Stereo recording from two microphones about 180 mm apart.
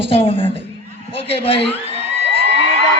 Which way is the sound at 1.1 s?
30° left (ahead or behind).